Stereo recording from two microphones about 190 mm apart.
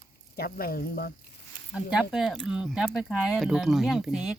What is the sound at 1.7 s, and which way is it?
Speech, 5° right (ahead or behind).